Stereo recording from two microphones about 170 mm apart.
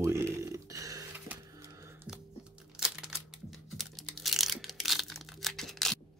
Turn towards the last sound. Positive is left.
turn(degrees=0)  # may be behind; listen again after turning